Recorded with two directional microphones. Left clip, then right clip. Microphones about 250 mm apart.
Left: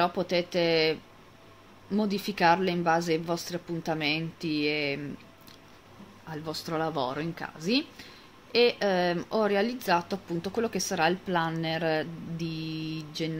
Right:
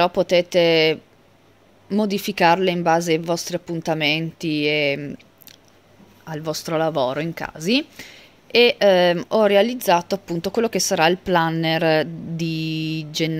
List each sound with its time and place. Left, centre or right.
0.0 s speech: right
6.2 s speech: right